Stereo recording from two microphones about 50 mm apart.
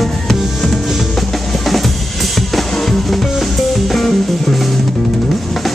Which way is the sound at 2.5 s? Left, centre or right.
Centre.